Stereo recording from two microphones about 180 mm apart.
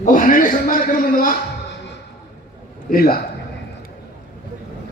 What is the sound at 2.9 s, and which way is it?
Speech, 55° left (ahead or behind).